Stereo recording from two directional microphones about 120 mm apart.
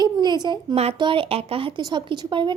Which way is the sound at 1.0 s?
45° right (ahead or behind).